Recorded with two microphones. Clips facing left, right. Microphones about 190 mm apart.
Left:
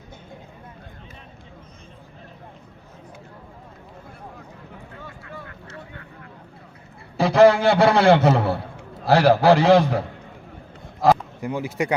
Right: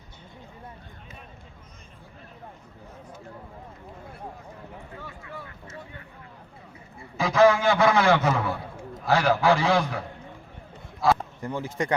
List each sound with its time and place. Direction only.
7.2 s a man's voice: 35° left (ahead or behind)
11.3 s speech: 10° left (ahead or behind)